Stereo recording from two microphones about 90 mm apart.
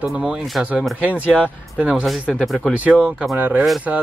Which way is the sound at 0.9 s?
15° right (ahead or behind).